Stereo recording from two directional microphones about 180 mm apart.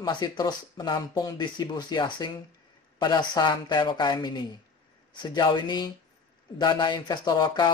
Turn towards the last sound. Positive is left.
turn(degrees=25)  # may be behind; listen again after turning